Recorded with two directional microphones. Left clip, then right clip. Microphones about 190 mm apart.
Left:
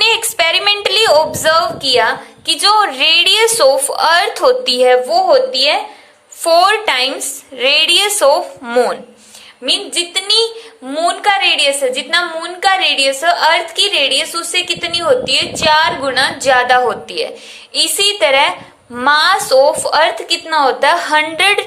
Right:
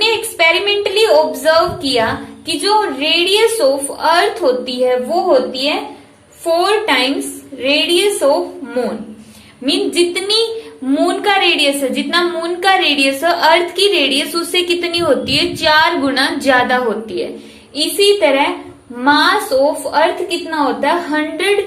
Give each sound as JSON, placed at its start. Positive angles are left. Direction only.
{"t": 0.0, "sound": "a sound", "side_deg": 40}
{"t": 2.5, "sound": "a woman's voice", "side_deg": 45}
{"t": 9.6, "sound": "a woman's voice", "side_deg": 25}